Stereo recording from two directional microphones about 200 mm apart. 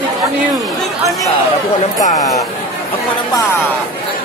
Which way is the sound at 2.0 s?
15° left (ahead or behind).